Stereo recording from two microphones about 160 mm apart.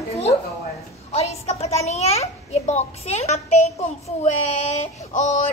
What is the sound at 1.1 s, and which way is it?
A child's voice, 40° left (ahead or behind).